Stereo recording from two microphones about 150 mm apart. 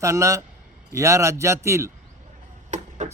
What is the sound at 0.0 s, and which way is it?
A man's voice, 20° right (ahead or behind).